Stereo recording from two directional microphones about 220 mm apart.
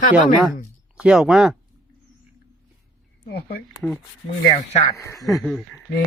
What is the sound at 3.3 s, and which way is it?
Speech, 45° left (ahead or behind).